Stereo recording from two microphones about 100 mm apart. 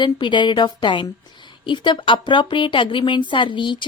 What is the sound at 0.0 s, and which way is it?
A woman's voice, 55° left (ahead or behind).